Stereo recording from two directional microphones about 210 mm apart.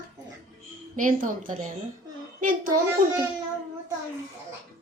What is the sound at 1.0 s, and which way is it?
Speech, 40° right (ahead or behind).